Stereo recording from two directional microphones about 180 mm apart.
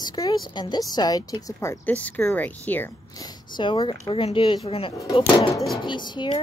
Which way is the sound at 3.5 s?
25° left (ahead or behind).